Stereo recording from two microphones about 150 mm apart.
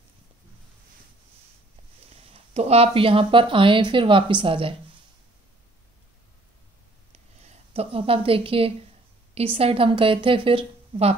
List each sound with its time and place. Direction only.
2.3 s speech: 45° right (ahead or behind)
7.7 s a woman's voice: 40° right (ahead or behind)